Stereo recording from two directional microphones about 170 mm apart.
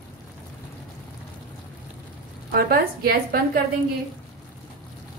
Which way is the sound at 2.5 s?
60° right (ahead or behind).